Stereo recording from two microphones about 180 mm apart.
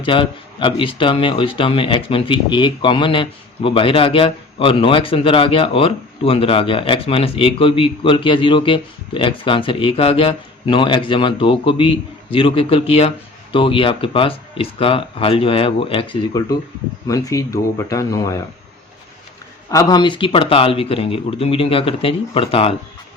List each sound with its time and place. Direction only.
0.0 s speech: 30° left (ahead or behind)
19.7 s speech: 20° left (ahead or behind)